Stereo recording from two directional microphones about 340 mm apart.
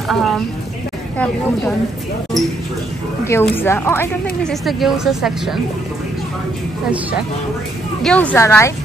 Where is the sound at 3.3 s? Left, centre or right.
Centre.